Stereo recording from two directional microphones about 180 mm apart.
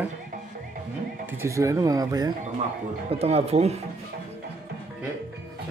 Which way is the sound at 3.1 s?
35° right (ahead or behind).